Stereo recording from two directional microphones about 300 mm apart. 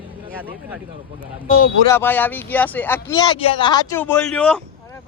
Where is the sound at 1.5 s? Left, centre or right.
Left.